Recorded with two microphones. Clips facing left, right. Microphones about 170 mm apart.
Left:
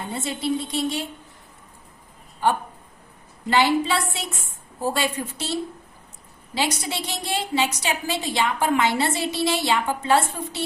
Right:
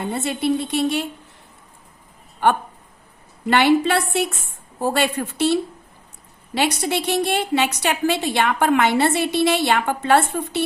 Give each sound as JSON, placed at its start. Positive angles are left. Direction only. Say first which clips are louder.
{"t": 0.1, "sound": "a woman's voice", "louder": "right 3 dB", "side_deg": -65}
{"t": 3.4, "sound": "a woman's voice", "louder": "right 4 dB", "side_deg": -65}